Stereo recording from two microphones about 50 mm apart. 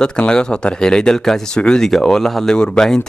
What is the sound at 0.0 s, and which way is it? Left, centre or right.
Speech, centre.